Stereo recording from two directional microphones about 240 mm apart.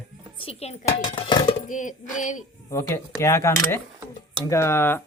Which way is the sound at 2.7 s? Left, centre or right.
Centre.